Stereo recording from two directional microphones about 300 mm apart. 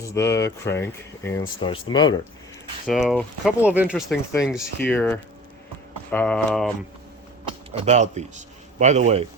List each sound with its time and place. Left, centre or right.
0.1 s speech: centre
2.8 s speech: centre
7.7 s speech: right